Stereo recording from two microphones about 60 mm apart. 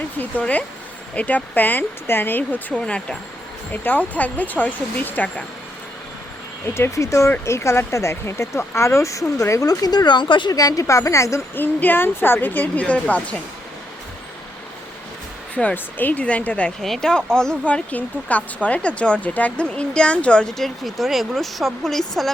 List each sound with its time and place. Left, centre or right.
0.2 s speech: left
3.7 s speech: left
6.7 s a woman's voice: left
11.5 s a woman's voice: left
15.7 s speech: left
16.8 s speech: centre
17.7 s speech: left
20.5 s speech: centre